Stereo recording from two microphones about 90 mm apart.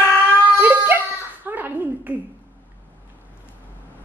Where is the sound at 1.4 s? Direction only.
20° right (ahead or behind).